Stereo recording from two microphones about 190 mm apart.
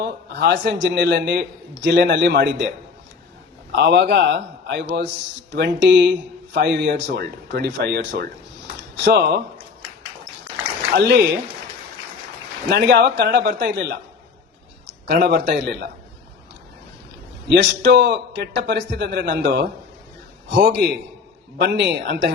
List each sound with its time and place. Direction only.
0.0 s a man's voice: 60° right (ahead or behind)
3.8 s a man's voice: 60° right (ahead or behind)
10.9 s a man's voice: 60° right (ahead or behind)
12.7 s a man's voice: 60° right (ahead or behind)
15.0 s a man's voice: 60° right (ahead or behind)
17.5 s a man's voice: 65° right (ahead or behind)